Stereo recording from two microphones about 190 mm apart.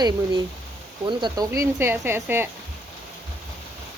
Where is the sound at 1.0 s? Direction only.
20° right (ahead or behind).